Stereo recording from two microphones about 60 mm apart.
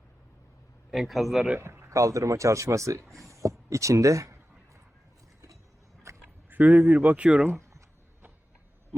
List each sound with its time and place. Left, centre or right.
0.9 s a man's voice: centre
1.5 s speech: right
3.0 s a sound: right
3.7 s speech: right
6.2 s speech: right